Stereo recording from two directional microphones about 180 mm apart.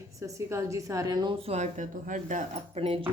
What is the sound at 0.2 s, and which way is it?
A woman's voice, 15° right (ahead or behind).